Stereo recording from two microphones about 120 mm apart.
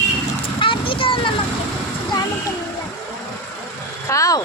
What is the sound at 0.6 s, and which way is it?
Vehicle, 45° left (ahead or behind).